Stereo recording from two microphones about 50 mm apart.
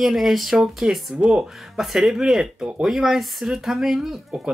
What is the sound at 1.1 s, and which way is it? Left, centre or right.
Speech, right.